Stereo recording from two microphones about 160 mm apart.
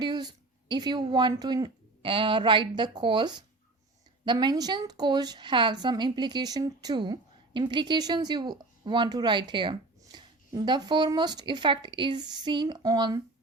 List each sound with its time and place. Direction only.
0.0 s a woman's voice: 25° right (ahead or behind)